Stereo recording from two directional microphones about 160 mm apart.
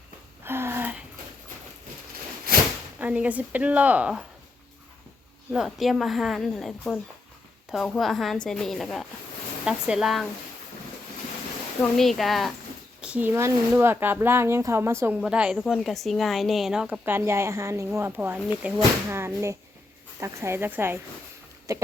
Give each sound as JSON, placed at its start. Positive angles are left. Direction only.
{"t": 0.4, "sound": "a sound", "side_deg": -15}
{"t": 3.0, "sound": "speech", "side_deg": -10}
{"t": 5.5, "sound": "speech", "side_deg": 0}
{"t": 11.8, "sound": "speech", "side_deg": 0}